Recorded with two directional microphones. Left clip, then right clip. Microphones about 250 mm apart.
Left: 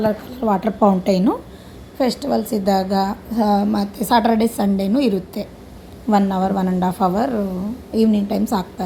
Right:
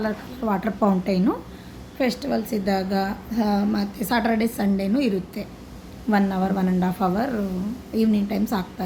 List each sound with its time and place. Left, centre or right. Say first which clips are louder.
0.0 s a woman's voice: left 7 dB; centre